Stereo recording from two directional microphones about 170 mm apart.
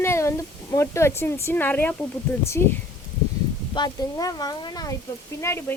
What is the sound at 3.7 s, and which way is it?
Speech, 25° left (ahead or behind).